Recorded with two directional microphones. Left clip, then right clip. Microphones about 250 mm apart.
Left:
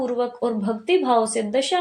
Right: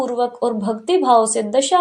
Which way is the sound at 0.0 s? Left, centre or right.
Centre.